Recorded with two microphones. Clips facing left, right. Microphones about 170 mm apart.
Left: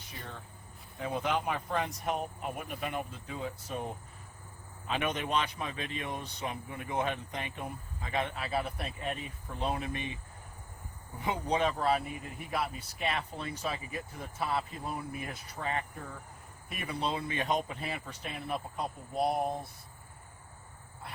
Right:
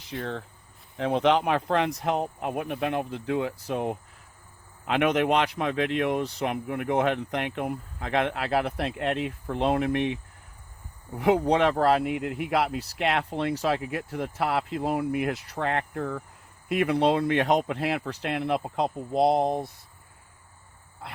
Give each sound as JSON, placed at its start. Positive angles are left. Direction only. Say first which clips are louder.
{"t": 0.1, "sound": "speech", "louder": "right 13 dB", "side_deg": -85}
{"t": 11.2, "sound": "speech", "louder": "right 9 dB", "side_deg": -75}
{"t": 16.6, "sound": "speech", "louder": "right 13 dB", "side_deg": -80}